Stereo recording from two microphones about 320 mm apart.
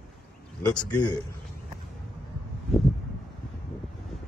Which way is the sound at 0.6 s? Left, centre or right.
Centre.